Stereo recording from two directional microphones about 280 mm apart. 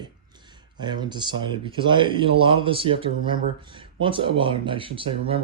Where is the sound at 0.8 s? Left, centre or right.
Centre.